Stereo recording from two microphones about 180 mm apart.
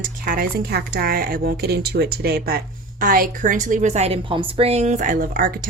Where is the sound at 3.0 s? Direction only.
50° right (ahead or behind).